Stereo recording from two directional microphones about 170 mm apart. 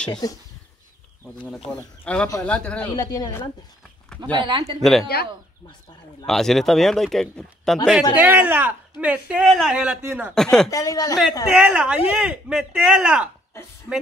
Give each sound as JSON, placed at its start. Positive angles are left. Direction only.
{"t": 0.1, "sound": "a woman's voice", "side_deg": 20}
{"t": 1.7, "sound": "speech", "side_deg": 5}
{"t": 2.9, "sound": "a woman's voice", "side_deg": 25}
{"t": 4.4, "sound": "speech", "side_deg": -30}
{"t": 5.0, "sound": "speech", "side_deg": 70}
{"t": 6.2, "sound": "speech", "side_deg": 0}
{"t": 8.2, "sound": "a man's voice", "side_deg": -10}
{"t": 10.3, "sound": "speech", "side_deg": 5}
{"t": 10.7, "sound": "a woman's voice", "side_deg": 20}
{"t": 11.5, "sound": "speech", "side_deg": -5}